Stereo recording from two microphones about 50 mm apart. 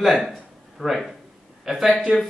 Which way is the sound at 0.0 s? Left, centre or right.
Centre.